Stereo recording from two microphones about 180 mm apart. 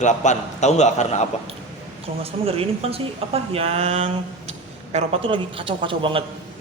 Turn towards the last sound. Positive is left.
turn(degrees=-30)  # may be behind; listen again after turning